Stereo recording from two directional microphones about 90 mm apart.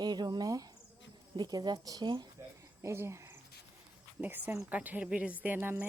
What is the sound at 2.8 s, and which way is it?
Speech, 30° right (ahead or behind).